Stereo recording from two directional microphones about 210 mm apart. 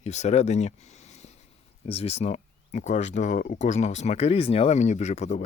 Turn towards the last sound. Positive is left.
turn(degrees=35)  # may be behind; listen again after turning